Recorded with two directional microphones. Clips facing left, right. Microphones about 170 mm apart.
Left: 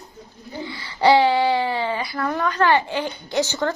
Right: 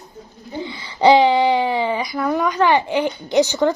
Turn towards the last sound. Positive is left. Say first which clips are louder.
# right 6 dB
turn(degrees=-15)  # may be behind; listen again after turning